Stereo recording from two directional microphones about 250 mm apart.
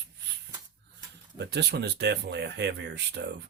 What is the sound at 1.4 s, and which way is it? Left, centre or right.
Speech, right.